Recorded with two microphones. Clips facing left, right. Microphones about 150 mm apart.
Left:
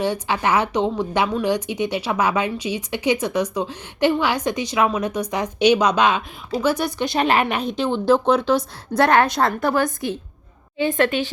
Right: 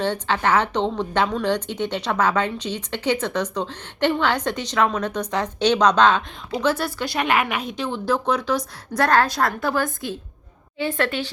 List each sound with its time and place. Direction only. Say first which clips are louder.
0.0 s a woman's voice: left 1 dB; 10° left (ahead or behind)